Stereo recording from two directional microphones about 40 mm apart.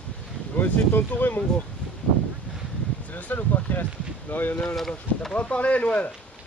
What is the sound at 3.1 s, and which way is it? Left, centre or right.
Speech, left.